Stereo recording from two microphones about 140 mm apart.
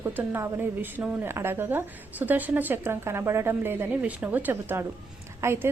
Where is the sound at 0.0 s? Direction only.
15° right (ahead or behind).